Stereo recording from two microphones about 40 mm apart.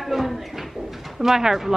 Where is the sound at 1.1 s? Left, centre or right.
Centre.